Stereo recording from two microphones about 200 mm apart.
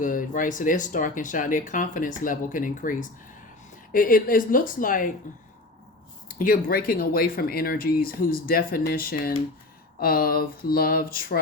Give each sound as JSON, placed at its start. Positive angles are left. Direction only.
{"t": 0.0, "sound": "speech", "side_deg": 40}